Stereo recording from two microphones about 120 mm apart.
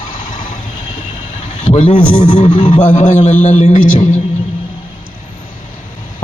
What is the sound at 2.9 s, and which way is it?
Speech, 85° left.